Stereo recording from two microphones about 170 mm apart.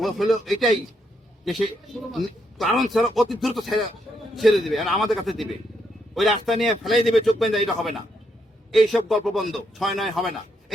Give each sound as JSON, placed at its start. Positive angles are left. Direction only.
{"t": 0.0, "sound": "a man's voice", "side_deg": 0}